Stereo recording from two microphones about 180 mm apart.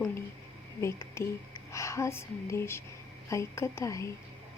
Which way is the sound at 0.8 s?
15° left (ahead or behind).